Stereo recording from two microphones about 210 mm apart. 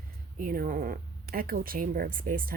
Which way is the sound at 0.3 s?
40° right (ahead or behind).